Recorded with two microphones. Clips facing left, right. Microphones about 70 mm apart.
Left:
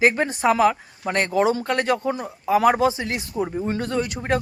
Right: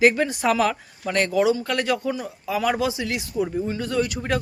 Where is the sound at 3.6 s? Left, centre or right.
Left.